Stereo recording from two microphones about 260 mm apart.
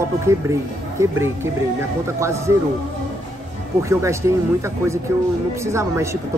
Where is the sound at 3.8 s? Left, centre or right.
Centre.